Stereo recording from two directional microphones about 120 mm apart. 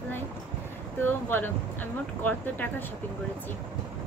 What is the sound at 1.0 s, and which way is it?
Speech, 15° left (ahead or behind).